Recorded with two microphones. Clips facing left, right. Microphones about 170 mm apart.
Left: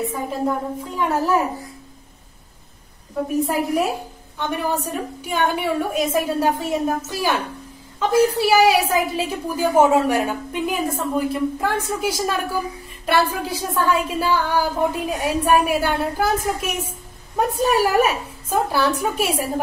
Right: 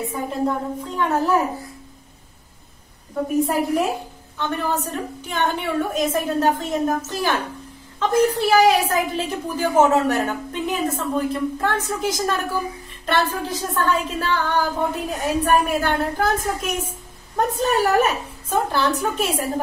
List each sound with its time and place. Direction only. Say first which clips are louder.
0.0 s a woman's voice: even; 5° left (ahead or behind)
4.4 s a woman's voice: left 1 dB; 10° left (ahead or behind)